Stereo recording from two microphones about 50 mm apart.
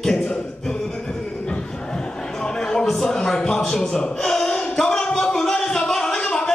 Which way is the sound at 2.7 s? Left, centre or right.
Centre.